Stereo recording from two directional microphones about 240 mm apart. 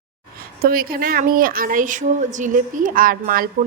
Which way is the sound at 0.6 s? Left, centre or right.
Right.